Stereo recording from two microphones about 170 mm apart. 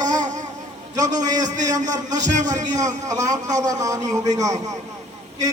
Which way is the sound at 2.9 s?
20° right (ahead or behind).